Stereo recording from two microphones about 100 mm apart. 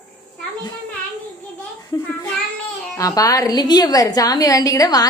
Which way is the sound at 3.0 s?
35° left (ahead or behind).